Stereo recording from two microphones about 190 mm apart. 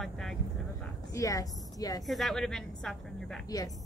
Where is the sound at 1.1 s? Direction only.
15° left (ahead or behind).